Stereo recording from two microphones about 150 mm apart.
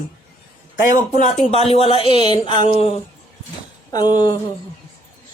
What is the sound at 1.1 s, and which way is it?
Speech, 50° left (ahead or behind).